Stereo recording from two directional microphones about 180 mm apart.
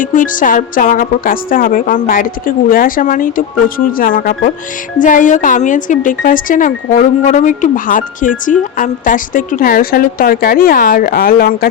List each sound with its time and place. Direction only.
0.0 s speech: 45° left (ahead or behind)